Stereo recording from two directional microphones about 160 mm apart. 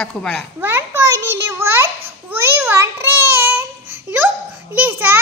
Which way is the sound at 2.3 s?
15° right (ahead or behind).